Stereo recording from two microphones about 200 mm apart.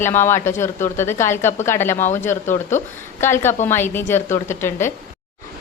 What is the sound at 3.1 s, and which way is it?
A woman's voice, 10° left (ahead or behind).